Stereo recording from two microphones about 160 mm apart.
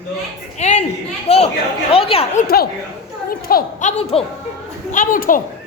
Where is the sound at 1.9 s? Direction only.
35° left (ahead or behind).